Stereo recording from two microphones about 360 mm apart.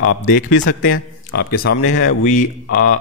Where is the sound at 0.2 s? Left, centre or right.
Left.